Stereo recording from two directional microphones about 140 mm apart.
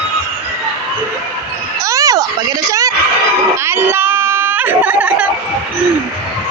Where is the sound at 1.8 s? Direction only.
25° right (ahead or behind).